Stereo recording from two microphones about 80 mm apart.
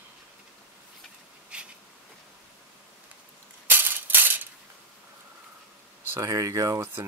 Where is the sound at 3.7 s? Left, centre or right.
Right.